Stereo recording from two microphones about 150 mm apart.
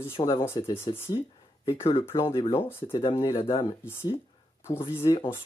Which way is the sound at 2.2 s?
35° left (ahead or behind).